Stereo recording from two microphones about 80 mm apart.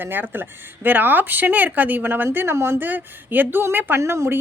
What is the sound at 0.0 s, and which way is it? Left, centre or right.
Speech, right.